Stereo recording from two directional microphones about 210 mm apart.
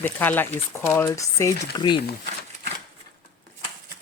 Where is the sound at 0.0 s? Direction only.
10° left (ahead or behind).